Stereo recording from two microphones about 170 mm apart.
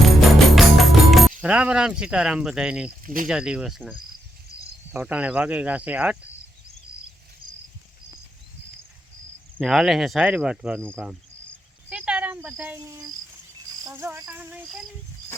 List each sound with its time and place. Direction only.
0.0 s music: centre (ahead or behind)
1.4 s speech: 5° right (ahead or behind)
3.0 s speech: 55° right (ahead or behind)
3.2 s speech: 5° right (ahead or behind)
4.9 s speech: 10° right (ahead or behind)
9.6 s speech: 5° right (ahead or behind)
11.9 s cricket: 5° right (ahead or behind)
13.8 s speech: 15° right (ahead or behind)